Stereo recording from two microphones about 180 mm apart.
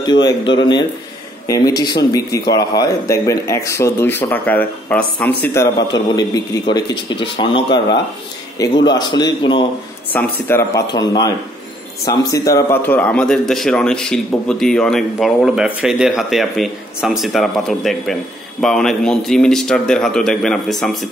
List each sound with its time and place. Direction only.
0.0 s a man's voice: 25° left (ahead or behind)
10.1 s a man's voice: 10° left (ahead or behind)